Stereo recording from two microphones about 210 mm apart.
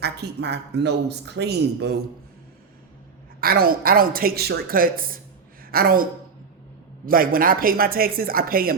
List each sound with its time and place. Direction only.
0.0 s speech: 50° right (ahead or behind)
3.4 s speech: 45° right (ahead or behind)